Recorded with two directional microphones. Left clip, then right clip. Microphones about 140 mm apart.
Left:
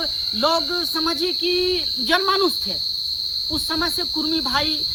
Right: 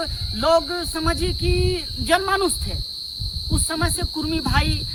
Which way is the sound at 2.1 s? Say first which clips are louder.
Even; 30° right (ahead or behind).